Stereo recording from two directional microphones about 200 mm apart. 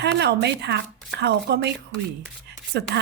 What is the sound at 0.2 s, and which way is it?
A woman's voice, 55° right (ahead or behind).